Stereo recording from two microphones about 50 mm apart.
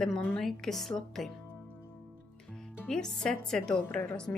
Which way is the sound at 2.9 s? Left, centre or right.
Centre.